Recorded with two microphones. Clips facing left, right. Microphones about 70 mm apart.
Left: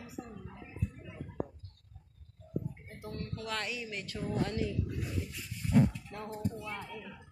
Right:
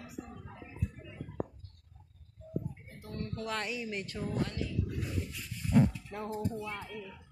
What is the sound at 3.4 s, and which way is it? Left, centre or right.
Music, right.